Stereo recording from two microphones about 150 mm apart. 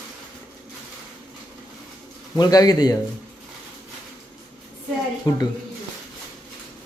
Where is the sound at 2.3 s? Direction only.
25° left (ahead or behind).